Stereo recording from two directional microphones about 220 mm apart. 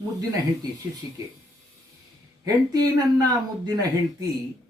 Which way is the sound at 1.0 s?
15° right (ahead or behind).